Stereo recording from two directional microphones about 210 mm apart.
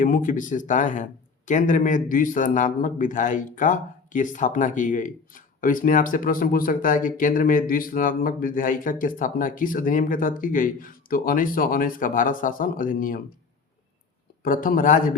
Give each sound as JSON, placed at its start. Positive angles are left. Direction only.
{"t": 0.0, "sound": "a man's voice", "side_deg": 40}
{"t": 14.4, "sound": "a man's voice", "side_deg": 40}